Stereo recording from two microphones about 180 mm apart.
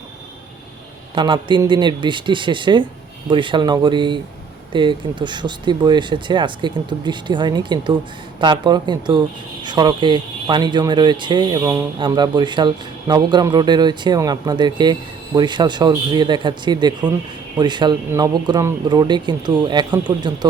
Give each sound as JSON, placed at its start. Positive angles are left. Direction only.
{"t": 1.1, "sound": "speech", "side_deg": -25}